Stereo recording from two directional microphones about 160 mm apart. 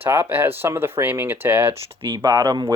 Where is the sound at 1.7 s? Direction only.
30° right (ahead or behind).